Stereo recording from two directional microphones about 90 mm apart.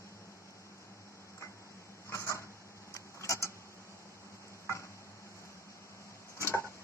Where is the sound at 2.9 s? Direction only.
35° left (ahead or behind).